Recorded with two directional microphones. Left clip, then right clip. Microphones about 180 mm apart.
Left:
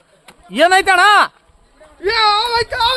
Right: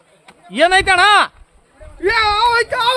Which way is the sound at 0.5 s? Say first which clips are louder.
Left 1 dB; 20° left (ahead or behind).